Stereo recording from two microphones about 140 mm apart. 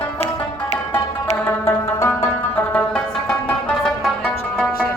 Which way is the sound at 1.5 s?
15° left (ahead or behind).